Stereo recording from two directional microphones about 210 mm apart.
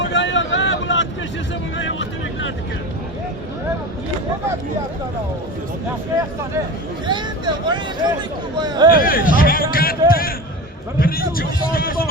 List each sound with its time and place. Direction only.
0.0 s vehicle: 60° left (ahead or behind)
1.8 s speech: 60° left (ahead or behind)
7.1 s speech: 20° right (ahead or behind)
8.9 s speech: 45° left (ahead or behind)